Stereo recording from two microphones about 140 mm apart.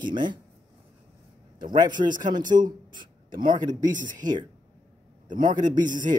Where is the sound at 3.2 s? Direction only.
80° right.